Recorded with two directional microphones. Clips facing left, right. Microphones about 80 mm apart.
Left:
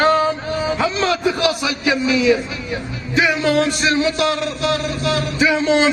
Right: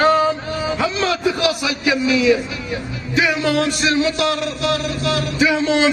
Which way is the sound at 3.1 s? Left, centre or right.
Left.